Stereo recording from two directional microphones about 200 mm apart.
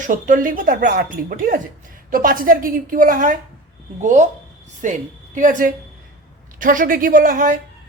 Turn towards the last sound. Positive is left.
turn(degrees=-45)  # may be behind; listen again after turning